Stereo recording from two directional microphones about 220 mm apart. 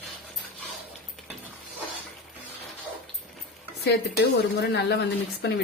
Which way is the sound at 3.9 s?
50° left (ahead or behind).